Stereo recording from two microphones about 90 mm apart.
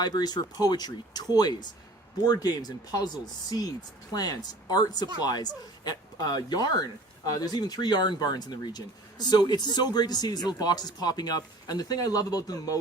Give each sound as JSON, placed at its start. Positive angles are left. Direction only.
{"t": 0.0, "sound": "speech", "side_deg": 50}
{"t": 2.2, "sound": "speech", "side_deg": 50}